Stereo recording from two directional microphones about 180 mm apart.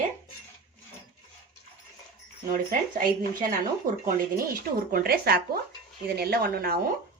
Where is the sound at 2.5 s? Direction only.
50° right (ahead or behind).